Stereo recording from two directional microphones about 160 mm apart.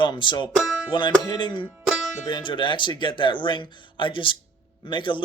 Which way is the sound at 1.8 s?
Centre (ahead or behind).